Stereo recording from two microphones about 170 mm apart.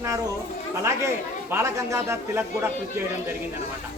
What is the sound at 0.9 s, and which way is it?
Speech, 15° right (ahead or behind).